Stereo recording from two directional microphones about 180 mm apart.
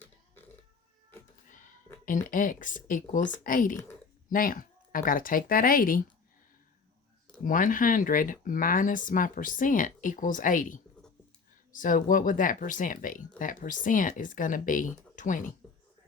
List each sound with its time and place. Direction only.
2.0 s speech: 50° left (ahead or behind)
7.4 s speech: 50° left (ahead or behind)